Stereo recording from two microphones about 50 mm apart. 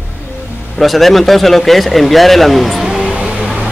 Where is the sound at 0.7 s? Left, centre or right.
Centre.